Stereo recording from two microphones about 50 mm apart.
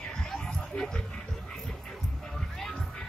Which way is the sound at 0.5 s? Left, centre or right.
Centre.